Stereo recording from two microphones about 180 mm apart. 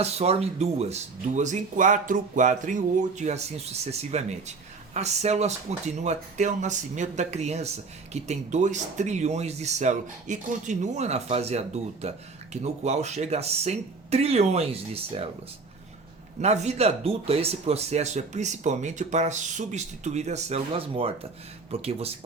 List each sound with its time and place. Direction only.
0.0 s speech: 35° right (ahead or behind)
16.4 s speech: 40° right (ahead or behind)